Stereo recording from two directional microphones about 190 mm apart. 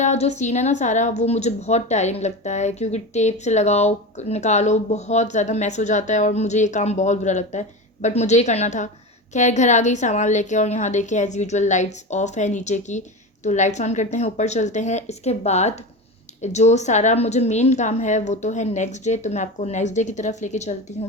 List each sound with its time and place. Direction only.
0.0 s a woman's voice: 35° left (ahead or behind)